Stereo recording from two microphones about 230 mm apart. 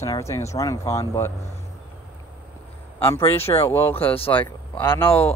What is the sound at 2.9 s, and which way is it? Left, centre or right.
Speech, centre.